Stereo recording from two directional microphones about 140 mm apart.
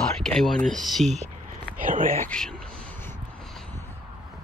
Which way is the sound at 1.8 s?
70° right (ahead or behind).